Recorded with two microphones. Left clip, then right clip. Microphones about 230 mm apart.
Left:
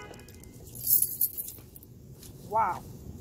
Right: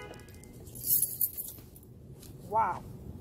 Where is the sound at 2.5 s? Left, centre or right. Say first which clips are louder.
Left 2 dB; left.